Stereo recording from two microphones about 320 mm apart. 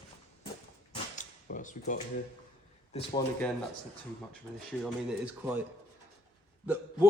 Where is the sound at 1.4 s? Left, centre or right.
Left.